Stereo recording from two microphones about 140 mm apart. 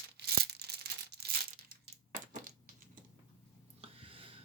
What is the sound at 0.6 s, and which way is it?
Tearing, 90° right.